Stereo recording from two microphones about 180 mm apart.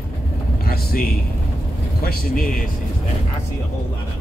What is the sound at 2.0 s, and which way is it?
Speech, 55° left (ahead or behind).